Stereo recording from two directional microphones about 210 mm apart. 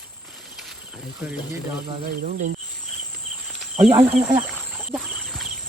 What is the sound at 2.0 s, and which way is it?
Cricket, 45° right (ahead or behind).